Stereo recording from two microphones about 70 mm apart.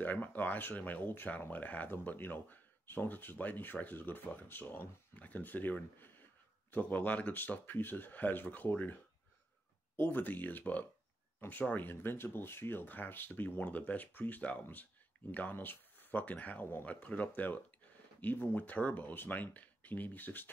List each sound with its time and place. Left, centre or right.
0.0 s speech: left